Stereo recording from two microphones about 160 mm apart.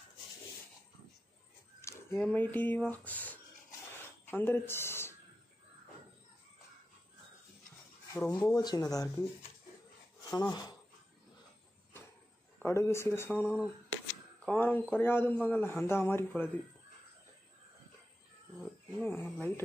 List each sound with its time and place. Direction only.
1.8 s a sound: 15° left (ahead or behind)
2.1 s speech: 10° left (ahead or behind)
8.1 s speech: 20° left (ahead or behind)
10.3 s speech: 25° left (ahead or behind)
12.5 s speech: 15° left (ahead or behind)
18.6 s speech: 15° left (ahead or behind)